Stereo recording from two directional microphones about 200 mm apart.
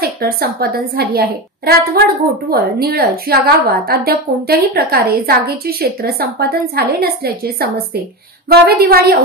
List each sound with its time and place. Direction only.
0.0 s a woman's voice: 50° right (ahead or behind)